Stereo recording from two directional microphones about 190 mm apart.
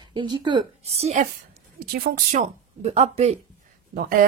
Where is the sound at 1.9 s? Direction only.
45° right (ahead or behind).